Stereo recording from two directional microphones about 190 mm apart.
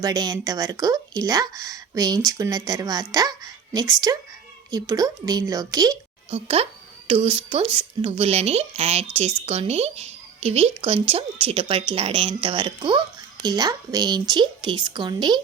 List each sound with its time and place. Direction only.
0.0 s speech: 20° right (ahead or behind)
7.1 s speech: 25° right (ahead or behind)